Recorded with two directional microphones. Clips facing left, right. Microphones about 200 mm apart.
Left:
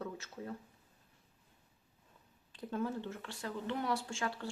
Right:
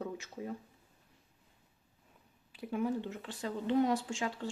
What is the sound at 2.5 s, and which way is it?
Speech, 10° right (ahead or behind).